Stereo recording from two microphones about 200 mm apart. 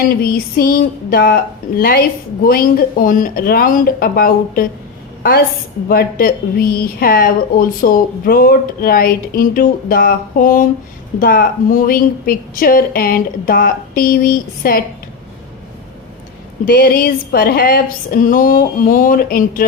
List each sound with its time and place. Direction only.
0.0 s a woman's voice: 50° left (ahead or behind)
5.9 s a woman's voice: 50° left (ahead or behind)
16.6 s a woman's voice: 45° left (ahead or behind)